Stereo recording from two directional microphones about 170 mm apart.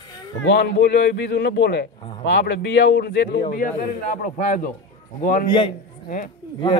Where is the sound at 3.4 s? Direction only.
55° left (ahead or behind).